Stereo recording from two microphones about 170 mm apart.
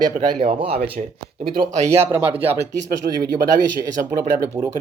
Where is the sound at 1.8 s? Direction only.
15° right (ahead or behind).